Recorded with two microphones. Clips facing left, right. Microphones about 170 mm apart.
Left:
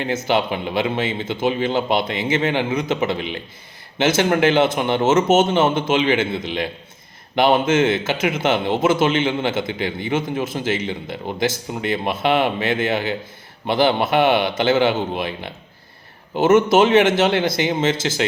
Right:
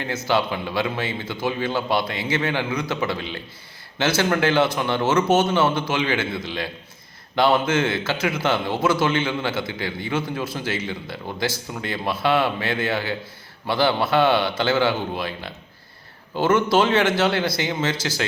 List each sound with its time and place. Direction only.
0.3 s a man's voice: 20° left (ahead or behind)